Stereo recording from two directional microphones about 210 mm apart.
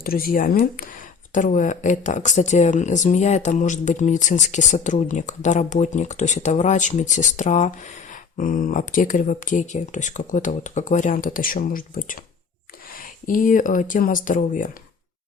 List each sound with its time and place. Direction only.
0.0 s speech: 45° left (ahead or behind)